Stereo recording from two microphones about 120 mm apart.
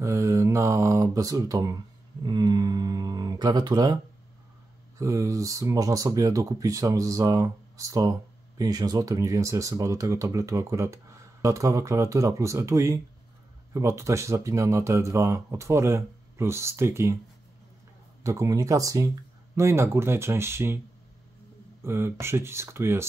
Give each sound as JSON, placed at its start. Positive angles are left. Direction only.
{"t": 0.0, "sound": "speech", "side_deg": -25}
{"t": 2.2, "sound": "a sound", "side_deg": -35}
{"t": 4.9, "sound": "speech", "side_deg": -25}
{"t": 18.2, "sound": "speech", "side_deg": -25}
{"t": 21.8, "sound": "speech", "side_deg": -20}